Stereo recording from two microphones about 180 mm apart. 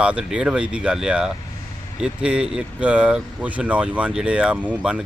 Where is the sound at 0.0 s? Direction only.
5° right (ahead or behind).